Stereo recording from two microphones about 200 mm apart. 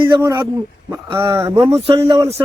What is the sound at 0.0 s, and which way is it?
Speech, 20° right (ahead or behind).